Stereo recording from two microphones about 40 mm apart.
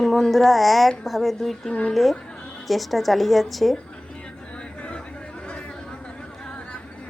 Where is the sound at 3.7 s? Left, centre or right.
Left.